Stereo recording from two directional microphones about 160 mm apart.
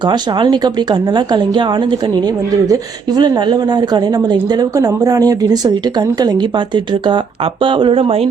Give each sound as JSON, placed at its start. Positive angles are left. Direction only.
{"t": 0.0, "sound": "speech", "side_deg": -30}